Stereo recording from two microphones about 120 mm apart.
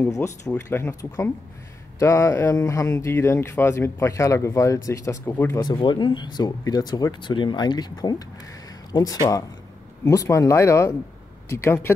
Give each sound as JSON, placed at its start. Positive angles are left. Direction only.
{"t": 0.5, "sound": "speech", "side_deg": 20}
{"t": 5.6, "sound": "speech", "side_deg": 40}